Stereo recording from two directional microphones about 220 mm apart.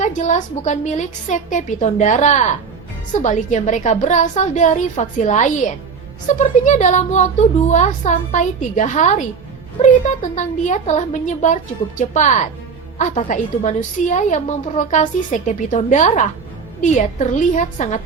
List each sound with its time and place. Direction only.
0.0 s a woman's voice: 35° left (ahead or behind)